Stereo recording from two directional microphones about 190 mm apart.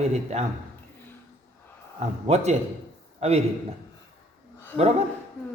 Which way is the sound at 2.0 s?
35° right (ahead or behind).